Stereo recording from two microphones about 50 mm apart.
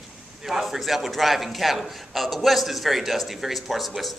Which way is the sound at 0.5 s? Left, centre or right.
Centre.